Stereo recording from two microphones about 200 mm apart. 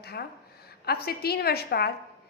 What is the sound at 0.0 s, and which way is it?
A woman's voice, 55° left (ahead or behind).